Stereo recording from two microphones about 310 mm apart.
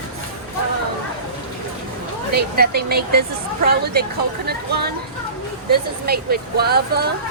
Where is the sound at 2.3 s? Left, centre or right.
Right.